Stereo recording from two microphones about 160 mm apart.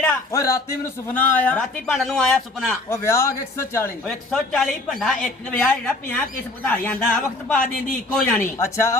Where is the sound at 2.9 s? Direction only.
15° left (ahead or behind).